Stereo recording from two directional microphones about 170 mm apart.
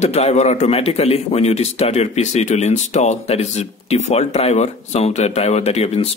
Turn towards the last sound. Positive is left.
turn(degrees=35)  # may be behind; listen again after turning